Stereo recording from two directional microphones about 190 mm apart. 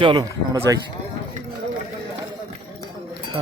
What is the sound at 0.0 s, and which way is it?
Speech, 25° right (ahead or behind).